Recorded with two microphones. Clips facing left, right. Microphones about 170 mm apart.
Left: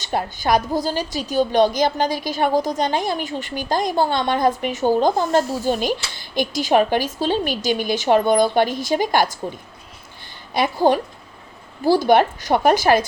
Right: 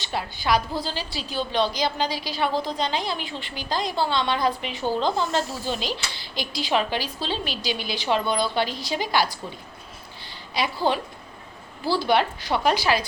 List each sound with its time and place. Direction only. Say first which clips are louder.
0.0 s a woman's voice: left 6 dB; 45° left (ahead or behind)
10.5 s a woman's voice: left 7 dB; 50° left (ahead or behind)